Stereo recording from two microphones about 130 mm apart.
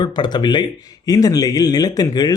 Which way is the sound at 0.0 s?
35° left (ahead or behind).